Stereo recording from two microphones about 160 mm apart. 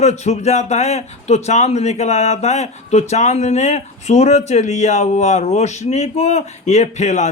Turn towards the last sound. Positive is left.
turn(degrees=45)  # may be behind; listen again after turning